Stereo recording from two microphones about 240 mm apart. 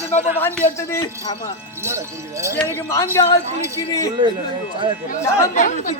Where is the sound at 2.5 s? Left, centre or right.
Centre.